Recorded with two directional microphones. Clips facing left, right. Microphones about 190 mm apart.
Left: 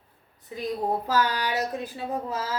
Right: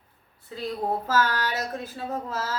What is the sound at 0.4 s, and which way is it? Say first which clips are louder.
Speech: left 1 dB; 15° left (ahead or behind).